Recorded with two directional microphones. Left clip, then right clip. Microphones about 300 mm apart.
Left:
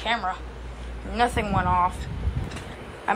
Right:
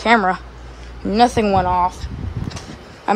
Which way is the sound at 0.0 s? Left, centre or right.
Right.